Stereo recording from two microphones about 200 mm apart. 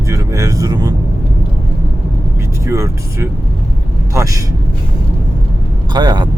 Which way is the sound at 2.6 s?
15° right (ahead or behind).